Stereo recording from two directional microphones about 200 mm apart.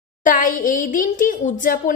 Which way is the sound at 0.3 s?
45° left (ahead or behind).